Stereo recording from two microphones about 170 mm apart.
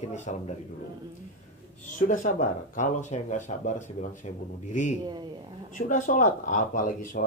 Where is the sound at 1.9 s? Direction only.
50° left (ahead or behind).